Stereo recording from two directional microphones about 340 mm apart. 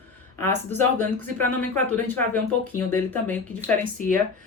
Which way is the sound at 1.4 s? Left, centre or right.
Centre.